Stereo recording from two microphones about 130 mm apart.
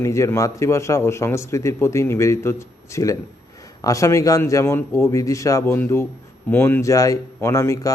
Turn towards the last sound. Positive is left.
turn(degrees=25)  # may be behind; listen again after turning